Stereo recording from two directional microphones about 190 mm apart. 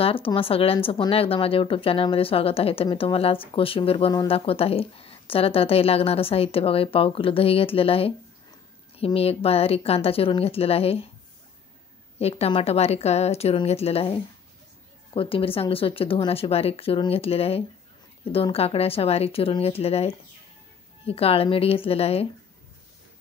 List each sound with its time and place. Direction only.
0.0 s speech: 30° left (ahead or behind)
12.2 s speech: 30° left (ahead or behind)